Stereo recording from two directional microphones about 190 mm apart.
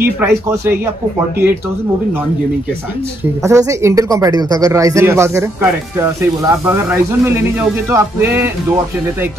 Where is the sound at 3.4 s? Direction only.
15° right (ahead or behind).